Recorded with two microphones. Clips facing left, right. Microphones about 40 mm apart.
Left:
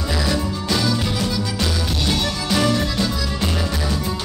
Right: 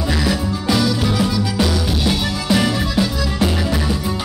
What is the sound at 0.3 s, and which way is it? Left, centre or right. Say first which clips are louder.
Music: right 3 dB; centre.